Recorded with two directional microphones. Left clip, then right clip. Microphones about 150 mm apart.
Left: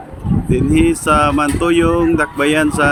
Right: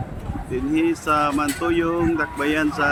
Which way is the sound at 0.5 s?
50° left (ahead or behind).